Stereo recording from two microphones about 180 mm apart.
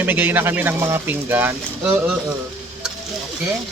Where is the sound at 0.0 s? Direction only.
10° right (ahead or behind).